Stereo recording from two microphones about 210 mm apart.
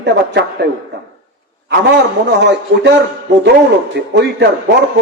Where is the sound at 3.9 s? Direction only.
55° right (ahead or behind).